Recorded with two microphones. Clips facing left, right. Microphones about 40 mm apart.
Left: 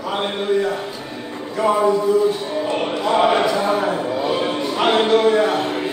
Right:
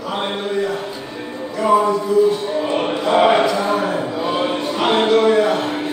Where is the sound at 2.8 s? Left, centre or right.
Centre.